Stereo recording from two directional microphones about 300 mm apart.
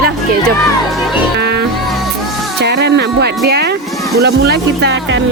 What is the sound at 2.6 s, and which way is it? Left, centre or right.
Music, right.